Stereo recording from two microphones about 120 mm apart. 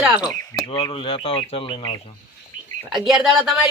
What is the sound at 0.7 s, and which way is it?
Speech, 45° left (ahead or behind).